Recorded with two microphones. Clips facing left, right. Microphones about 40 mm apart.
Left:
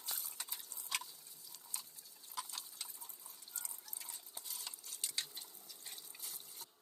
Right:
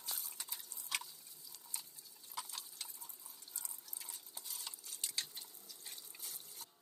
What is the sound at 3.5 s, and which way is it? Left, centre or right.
Water, left.